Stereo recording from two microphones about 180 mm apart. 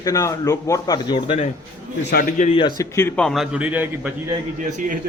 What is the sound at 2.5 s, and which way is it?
Speech, 25° left (ahead or behind).